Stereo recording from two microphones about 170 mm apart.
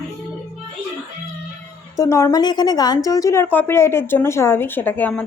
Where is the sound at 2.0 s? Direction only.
20° left (ahead or behind).